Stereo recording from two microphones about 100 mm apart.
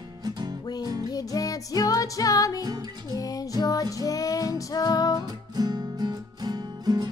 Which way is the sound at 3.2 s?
40° left (ahead or behind).